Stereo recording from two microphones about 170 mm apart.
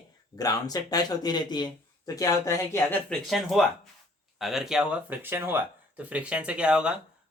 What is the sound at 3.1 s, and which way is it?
Speech, centre (ahead or behind).